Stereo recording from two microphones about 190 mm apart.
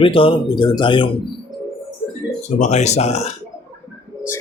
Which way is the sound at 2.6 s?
35° left (ahead or behind).